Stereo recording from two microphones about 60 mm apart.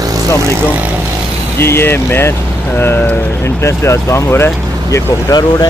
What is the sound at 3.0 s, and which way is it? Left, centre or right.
Speech, left.